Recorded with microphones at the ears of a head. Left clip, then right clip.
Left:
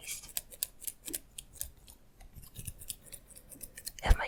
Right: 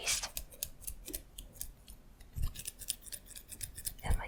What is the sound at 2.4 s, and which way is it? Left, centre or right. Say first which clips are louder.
Scissors: right 5 dB; right.